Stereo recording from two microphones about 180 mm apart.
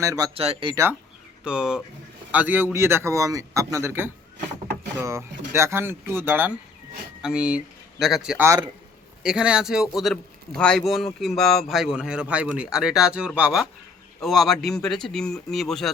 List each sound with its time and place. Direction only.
0.0 s a man's voice: 15° right (ahead or behind)
0.3 s speech: 35° right (ahead or behind)
1.5 s a man's voice: 5° right (ahead or behind)
8.4 s a man's voice: 20° right (ahead or behind)
9.2 s a man's voice: 5° right (ahead or behind)